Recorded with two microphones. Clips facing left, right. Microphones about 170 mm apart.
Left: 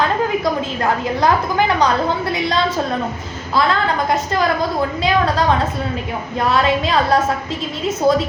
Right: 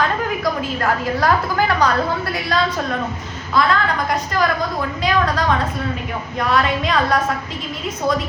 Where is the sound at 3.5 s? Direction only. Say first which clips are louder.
Left 1 dB; 25° left (ahead or behind).